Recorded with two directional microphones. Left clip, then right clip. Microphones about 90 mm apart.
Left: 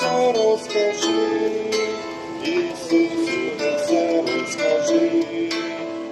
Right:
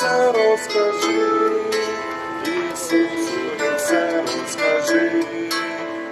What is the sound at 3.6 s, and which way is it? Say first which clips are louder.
Music: right 1 dB; 40° left (ahead or behind).